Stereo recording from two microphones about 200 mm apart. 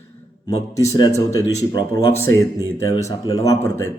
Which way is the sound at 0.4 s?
15° left (ahead or behind).